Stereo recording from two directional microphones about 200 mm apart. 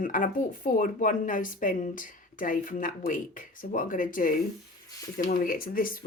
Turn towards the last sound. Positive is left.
turn(degrees=45)  # may be behind; listen again after turning